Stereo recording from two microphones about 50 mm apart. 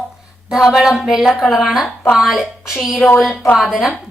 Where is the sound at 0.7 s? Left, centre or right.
Centre.